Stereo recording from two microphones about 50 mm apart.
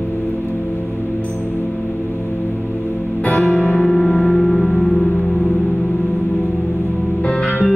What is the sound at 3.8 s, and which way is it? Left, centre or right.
Music, centre.